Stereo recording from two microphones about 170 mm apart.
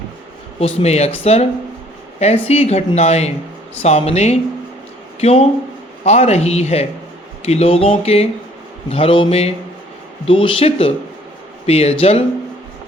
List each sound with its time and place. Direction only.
0.6 s speech: 40° left (ahead or behind)